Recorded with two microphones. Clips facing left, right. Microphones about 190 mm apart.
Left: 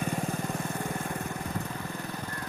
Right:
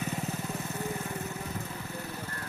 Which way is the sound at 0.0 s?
50° left (ahead or behind).